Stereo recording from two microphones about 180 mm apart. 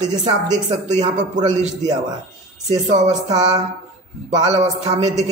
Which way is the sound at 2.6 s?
40° right (ahead or behind).